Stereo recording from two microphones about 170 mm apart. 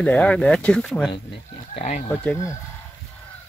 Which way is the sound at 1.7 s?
45° left (ahead or behind).